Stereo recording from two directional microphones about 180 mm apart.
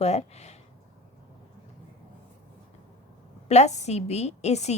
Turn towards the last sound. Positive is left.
turn(degrees=40)  # may be behind; listen again after turning